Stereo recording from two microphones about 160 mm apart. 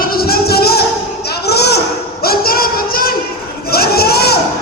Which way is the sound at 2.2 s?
70° left (ahead or behind).